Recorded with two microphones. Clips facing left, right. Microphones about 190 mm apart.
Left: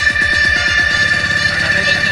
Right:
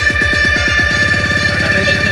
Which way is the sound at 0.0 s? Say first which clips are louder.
Right 5 dB; 50° right (ahead or behind).